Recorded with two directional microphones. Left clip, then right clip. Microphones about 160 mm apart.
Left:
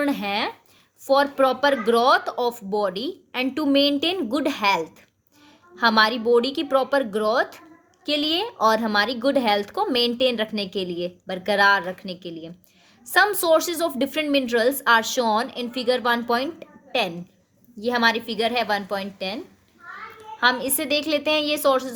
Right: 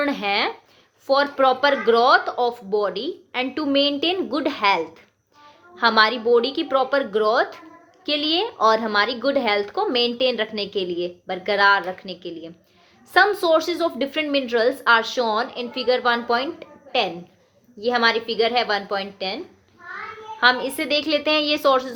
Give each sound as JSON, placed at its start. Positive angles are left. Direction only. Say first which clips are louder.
{"t": 0.0, "sound": "a woman's voice", "louder": "right 3 dB", "side_deg": 35}
{"t": 20.4, "sound": "a woman's voice", "louder": "right 3 dB", "side_deg": 40}